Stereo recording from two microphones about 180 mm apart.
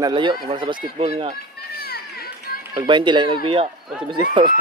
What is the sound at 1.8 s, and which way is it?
Children playing, 60° left (ahead or behind).